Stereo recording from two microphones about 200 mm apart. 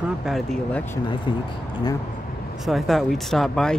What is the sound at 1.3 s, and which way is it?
Speech, 25° left (ahead or behind).